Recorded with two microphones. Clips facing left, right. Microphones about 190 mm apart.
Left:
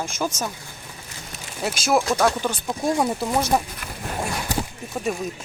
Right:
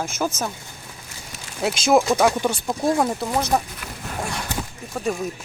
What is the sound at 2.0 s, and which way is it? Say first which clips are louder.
Speech: right 2 dB; 5° right (ahead or behind).